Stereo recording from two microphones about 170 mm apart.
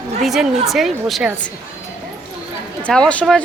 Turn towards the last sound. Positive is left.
turn(degrees=5)  # may be behind; listen again after turning